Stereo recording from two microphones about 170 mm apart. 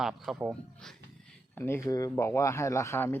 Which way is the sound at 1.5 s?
15° left (ahead or behind).